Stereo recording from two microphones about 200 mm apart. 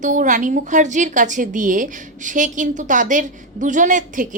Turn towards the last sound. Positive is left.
turn(degrees=-40)  # may be behind; listen again after turning